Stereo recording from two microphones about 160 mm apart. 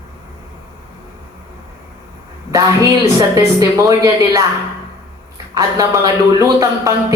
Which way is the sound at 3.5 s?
20° right (ahead or behind).